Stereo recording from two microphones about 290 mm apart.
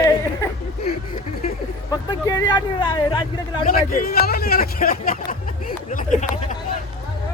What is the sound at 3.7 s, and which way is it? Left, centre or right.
A man's voice, left.